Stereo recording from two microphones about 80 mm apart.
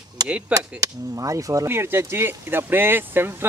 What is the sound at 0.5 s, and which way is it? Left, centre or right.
Speech, right.